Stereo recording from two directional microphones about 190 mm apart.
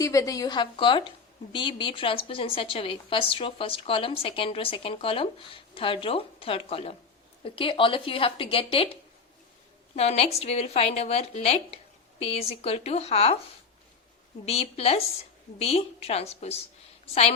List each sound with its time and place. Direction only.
0.0 s a woman's voice: 15° left (ahead or behind); by 13.4 s 35° left (ahead or behind)
14.4 s speech: 30° left (ahead or behind)